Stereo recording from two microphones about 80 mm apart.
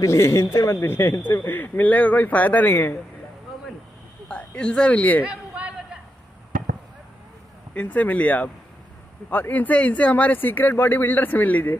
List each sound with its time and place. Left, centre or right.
0.0 s a man's voice: left
4.3 s speech: centre
5.2 s a sound: centre
7.7 s a man's voice: centre